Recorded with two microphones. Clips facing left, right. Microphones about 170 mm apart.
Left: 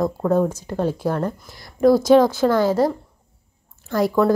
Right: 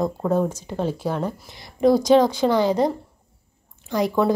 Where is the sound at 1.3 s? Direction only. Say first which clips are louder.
Left 2 dB; 20° right (ahead or behind).